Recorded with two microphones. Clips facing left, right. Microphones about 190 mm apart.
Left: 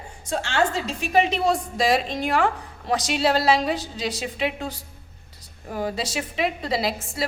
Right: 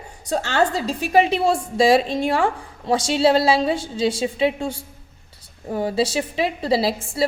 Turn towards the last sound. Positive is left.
turn(degrees=-30)  # may be behind; listen again after turning